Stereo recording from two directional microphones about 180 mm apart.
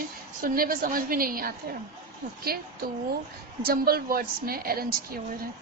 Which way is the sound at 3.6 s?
55° right (ahead or behind).